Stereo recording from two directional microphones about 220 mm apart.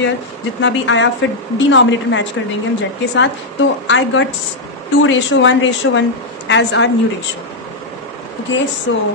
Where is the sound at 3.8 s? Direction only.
60° left (ahead or behind).